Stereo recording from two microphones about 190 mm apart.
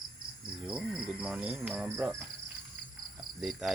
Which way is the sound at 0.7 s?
5° right (ahead or behind).